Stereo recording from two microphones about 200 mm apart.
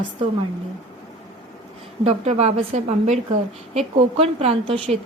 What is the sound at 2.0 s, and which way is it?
A woman's voice, 30° right (ahead or behind).